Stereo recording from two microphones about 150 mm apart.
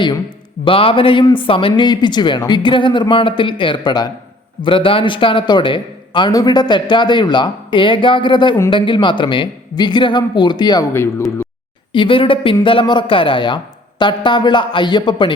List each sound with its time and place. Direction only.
0.6 s a man's voice: 35° left (ahead or behind)
11.9 s a man's voice: 35° left (ahead or behind)